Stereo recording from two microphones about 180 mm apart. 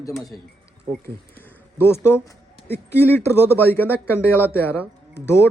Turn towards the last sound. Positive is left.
turn(degrees=15)  # may be behind; listen again after turning